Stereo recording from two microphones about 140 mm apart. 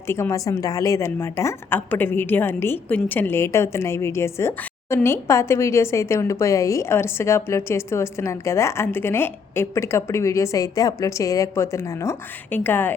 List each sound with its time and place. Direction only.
0.1 s a woman's voice: 20° left (ahead or behind)